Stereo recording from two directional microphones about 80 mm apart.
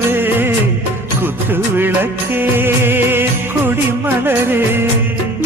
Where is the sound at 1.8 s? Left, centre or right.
Right.